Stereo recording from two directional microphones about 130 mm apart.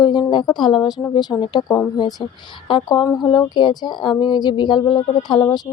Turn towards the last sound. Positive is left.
turn(degrees=35)  # may be behind; listen again after turning